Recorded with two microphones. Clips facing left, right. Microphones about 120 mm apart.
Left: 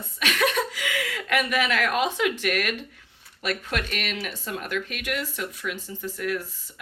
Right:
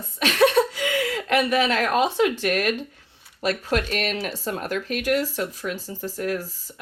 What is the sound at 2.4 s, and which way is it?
Speech, 30° right (ahead or behind).